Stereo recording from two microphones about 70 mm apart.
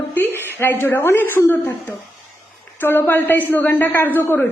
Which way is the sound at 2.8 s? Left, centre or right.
Left.